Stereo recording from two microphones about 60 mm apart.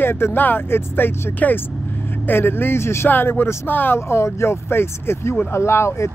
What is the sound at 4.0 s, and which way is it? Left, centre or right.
Speech, left.